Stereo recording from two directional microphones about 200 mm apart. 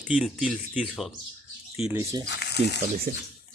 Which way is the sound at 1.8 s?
10° right (ahead or behind).